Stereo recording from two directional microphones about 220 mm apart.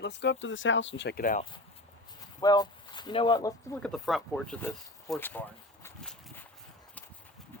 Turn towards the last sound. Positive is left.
turn(degrees=10)  # may be behind; listen again after turning